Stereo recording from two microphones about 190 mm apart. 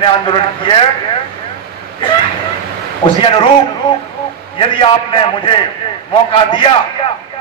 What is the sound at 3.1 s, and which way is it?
Speech, 25° left (ahead or behind).